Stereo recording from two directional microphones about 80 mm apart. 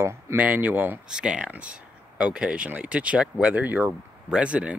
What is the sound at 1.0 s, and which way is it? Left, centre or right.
Speech, centre.